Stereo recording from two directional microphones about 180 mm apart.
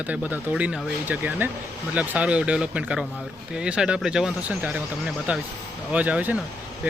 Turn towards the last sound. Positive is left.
turn(degrees=-10)  # may be behind; listen again after turning